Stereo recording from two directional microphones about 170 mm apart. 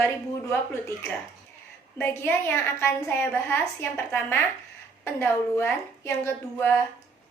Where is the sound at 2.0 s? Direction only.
15° left (ahead or behind).